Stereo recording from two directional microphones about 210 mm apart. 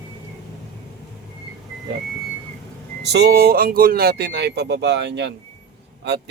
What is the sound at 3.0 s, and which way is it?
Speech, 50° right (ahead or behind).